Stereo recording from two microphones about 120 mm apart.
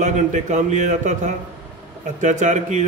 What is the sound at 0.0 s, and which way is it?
A man's voice, 90° right.